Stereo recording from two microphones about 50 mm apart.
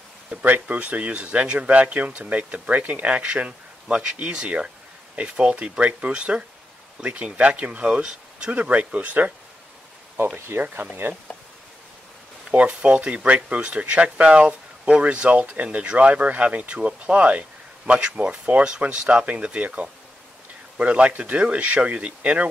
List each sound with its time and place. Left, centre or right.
0.4 s speech: right; by 8.5 s centre
8.5 s speech: right
10.1 s speech: right
10.6 s speech: right
12.5 s speech: right